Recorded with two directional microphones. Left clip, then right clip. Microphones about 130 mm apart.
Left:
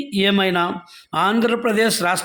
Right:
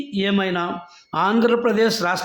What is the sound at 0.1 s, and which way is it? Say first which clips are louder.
Speech: left 4 dB; 30° left (ahead or behind).